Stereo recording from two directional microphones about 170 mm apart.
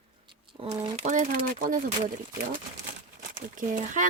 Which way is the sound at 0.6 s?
20° right (ahead or behind).